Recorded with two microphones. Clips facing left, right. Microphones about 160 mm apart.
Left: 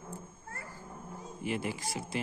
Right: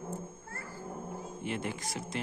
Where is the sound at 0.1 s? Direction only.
40° right (ahead or behind).